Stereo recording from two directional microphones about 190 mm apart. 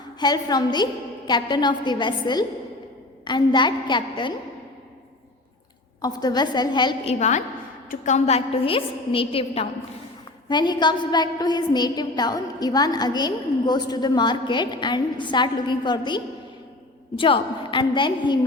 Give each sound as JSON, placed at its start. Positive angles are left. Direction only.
{"t": 0.2, "sound": "a woman's voice", "side_deg": 20}
{"t": 6.0, "sound": "a woman's voice", "side_deg": 20}